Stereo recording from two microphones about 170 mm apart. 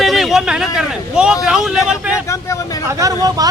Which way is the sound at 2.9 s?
20° right (ahead or behind).